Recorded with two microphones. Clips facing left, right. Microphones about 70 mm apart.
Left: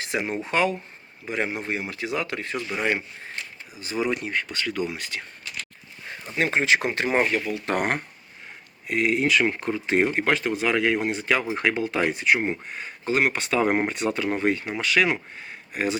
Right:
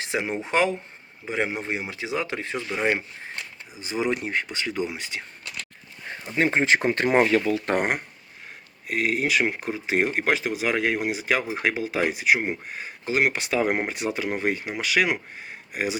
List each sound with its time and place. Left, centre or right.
0.1 s speech: centre
6.4 s speech: right
7.8 s speech: centre